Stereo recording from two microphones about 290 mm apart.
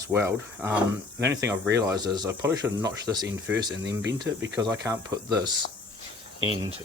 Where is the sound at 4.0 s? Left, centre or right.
Right.